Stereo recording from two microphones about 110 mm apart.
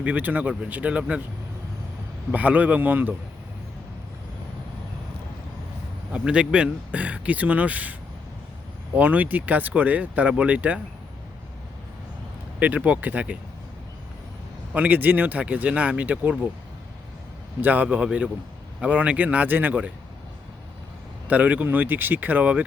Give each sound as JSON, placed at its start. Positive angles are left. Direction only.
{"t": 0.0, "sound": "speech", "side_deg": -15}
{"t": 2.3, "sound": "speech", "side_deg": -15}
{"t": 6.1, "sound": "speech", "side_deg": -10}
{"t": 9.0, "sound": "speech", "side_deg": -15}
{"t": 12.5, "sound": "speech", "side_deg": -15}
{"t": 14.7, "sound": "speech", "side_deg": -15}
{"t": 17.6, "sound": "speech", "side_deg": -15}
{"t": 21.2, "sound": "speech", "side_deg": -15}